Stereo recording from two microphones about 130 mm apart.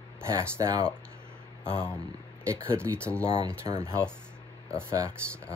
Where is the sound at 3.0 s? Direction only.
10° left (ahead or behind).